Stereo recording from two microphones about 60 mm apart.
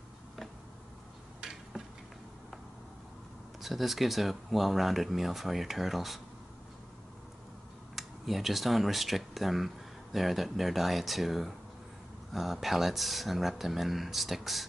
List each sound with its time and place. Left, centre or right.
3.6 s speech: centre
7.9 s speech: centre